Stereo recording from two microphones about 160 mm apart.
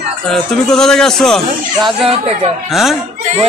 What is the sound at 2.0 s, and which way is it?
Speech, 40° right (ahead or behind).